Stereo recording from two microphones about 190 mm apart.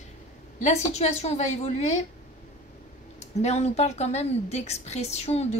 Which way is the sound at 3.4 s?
35° left (ahead or behind).